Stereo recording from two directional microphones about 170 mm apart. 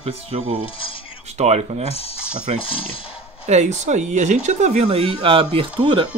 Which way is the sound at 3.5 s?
45° right (ahead or behind).